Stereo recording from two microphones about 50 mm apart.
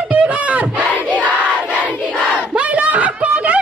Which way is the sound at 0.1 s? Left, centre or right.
Right.